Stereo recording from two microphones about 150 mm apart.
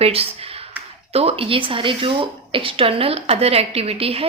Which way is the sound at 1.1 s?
40° right (ahead or behind).